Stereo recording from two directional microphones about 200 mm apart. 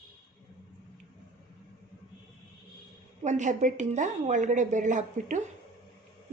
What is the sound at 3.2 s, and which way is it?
A woman's voice, 35° right (ahead or behind).